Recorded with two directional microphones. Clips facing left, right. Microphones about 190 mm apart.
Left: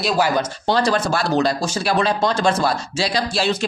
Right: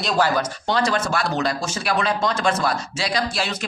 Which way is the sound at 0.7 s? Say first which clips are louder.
Left 4 dB; 35° left (ahead or behind).